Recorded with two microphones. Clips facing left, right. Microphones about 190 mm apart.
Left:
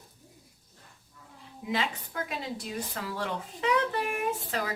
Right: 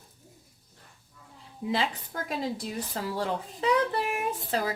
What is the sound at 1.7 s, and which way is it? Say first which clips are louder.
A woman's voice: right 1 dB; 30° right (ahead or behind).